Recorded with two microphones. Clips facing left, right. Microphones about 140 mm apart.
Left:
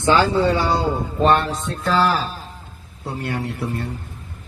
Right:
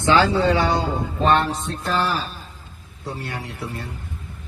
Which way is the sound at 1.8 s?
85° left.